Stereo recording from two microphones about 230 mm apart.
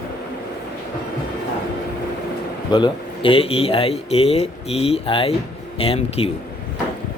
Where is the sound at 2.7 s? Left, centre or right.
Left.